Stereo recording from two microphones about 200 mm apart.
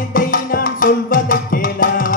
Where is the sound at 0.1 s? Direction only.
45° left (ahead or behind).